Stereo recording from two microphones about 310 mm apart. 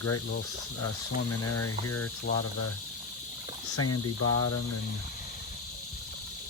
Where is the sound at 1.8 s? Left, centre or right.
Left.